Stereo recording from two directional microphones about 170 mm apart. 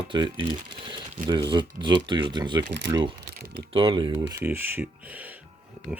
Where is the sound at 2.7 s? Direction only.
90° right.